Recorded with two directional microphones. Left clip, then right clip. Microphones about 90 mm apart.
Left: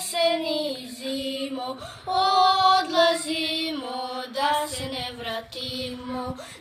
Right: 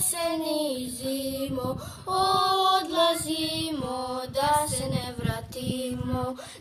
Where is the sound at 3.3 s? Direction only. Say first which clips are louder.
Left 3 dB; 45° right (ahead or behind).